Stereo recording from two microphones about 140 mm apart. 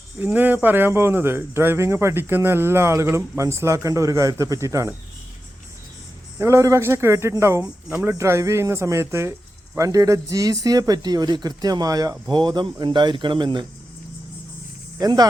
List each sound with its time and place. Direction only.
0.2 s speech: 15° right (ahead or behind)
6.4 s speech: 20° right (ahead or behind)
14.9 s speech: 30° right (ahead or behind)